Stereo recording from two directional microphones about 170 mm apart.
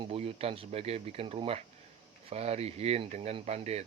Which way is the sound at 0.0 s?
35° right (ahead or behind).